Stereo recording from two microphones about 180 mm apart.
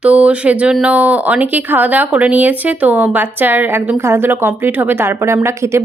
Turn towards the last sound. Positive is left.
turn(degrees=-15)  # may be behind; listen again after turning